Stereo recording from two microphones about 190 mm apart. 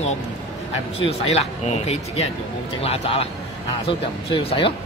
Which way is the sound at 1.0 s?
35° left (ahead or behind).